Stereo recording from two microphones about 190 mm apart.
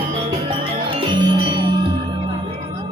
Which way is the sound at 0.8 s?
25° right (ahead or behind).